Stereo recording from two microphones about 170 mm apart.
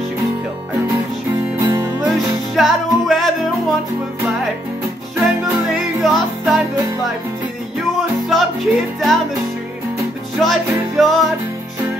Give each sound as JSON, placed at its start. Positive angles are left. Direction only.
{"t": 1.6, "sound": "music", "side_deg": -15}
{"t": 2.0, "sound": "music", "side_deg": 0}
{"t": 5.2, "sound": "music", "side_deg": 0}
{"t": 8.3, "sound": "music", "side_deg": 0}
{"t": 10.4, "sound": "music", "side_deg": 0}